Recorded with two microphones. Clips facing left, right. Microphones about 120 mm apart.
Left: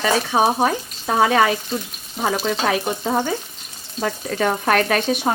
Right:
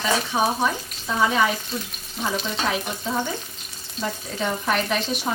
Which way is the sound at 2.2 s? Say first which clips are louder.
Left 5 dB; 45° left (ahead or behind).